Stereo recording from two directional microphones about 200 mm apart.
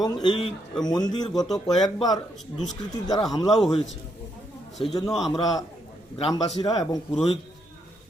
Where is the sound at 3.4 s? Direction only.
Centre (ahead or behind).